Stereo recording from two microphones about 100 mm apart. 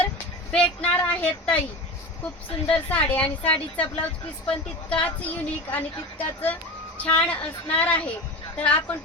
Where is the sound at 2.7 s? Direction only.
15° left (ahead or behind).